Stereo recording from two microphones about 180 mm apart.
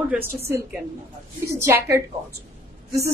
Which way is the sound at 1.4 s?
15° right (ahead or behind).